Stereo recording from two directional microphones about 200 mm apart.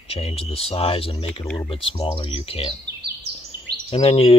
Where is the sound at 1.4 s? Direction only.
5° left (ahead or behind).